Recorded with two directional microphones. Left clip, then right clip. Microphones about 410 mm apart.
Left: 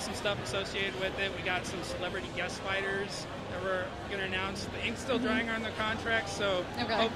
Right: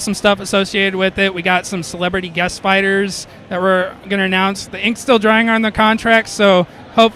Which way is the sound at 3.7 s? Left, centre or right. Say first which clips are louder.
Right 19 dB; right.